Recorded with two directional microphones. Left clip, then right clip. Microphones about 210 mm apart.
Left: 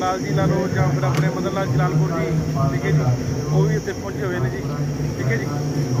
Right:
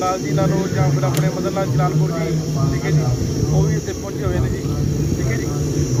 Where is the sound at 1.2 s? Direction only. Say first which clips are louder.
Right 2 dB; centre (ahead or behind).